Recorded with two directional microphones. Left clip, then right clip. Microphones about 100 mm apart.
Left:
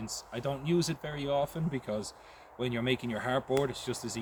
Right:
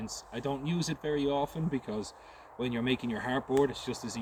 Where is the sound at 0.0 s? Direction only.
40° left (ahead or behind).